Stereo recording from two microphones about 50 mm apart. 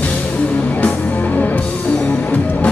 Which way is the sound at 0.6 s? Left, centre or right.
Left.